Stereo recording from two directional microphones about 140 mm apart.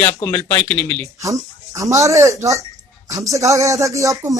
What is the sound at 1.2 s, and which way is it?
Speech, 25° right (ahead or behind).